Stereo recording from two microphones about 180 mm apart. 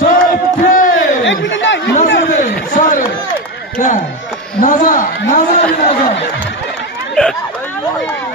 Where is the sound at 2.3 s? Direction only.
45° left (ahead or behind).